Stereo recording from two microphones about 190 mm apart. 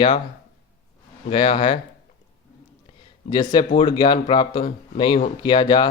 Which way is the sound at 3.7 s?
25° left (ahead or behind).